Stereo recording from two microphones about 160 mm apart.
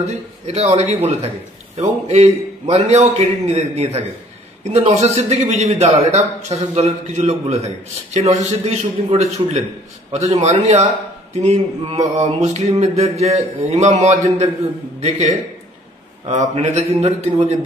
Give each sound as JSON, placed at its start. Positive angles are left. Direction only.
{"t": 0.0, "sound": "a man's voice", "side_deg": -40}